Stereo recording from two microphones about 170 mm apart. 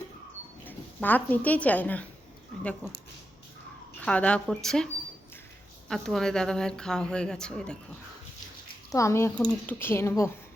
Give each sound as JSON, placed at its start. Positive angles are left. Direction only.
{"t": 0.6, "sound": "speech", "side_deg": 10}
{"t": 4.0, "sound": "a woman's voice", "side_deg": 5}
{"t": 5.9, "sound": "a woman's voice", "side_deg": 0}
{"t": 8.9, "sound": "a woman's voice", "side_deg": 15}